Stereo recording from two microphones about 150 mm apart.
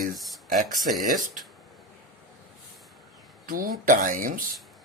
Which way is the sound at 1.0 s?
65° right (ahead or behind).